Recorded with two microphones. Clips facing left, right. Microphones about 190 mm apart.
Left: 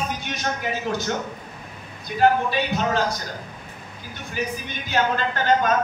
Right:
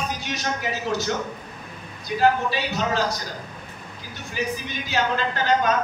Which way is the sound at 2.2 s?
55° left (ahead or behind).